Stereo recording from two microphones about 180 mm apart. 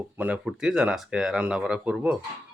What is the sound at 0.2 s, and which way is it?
Speech, 5° right (ahead or behind).